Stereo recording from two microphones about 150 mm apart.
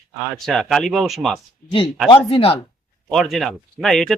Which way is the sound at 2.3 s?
40° left (ahead or behind).